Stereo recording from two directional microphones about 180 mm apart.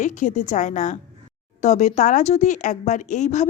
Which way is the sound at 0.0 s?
45° left (ahead or behind).